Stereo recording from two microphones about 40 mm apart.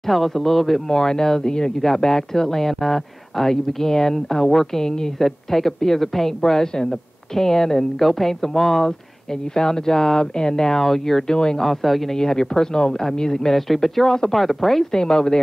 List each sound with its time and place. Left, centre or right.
0.0 s a woman's voice: centre
11.6 s speech: centre
12.1 s a woman's voice: centre
13.6 s speech: centre
15.0 s speech: centre